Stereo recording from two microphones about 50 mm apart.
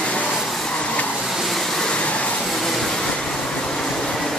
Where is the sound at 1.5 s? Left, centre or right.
Centre.